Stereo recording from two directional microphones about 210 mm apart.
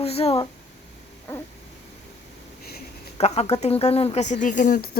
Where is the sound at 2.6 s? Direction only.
50° left (ahead or behind).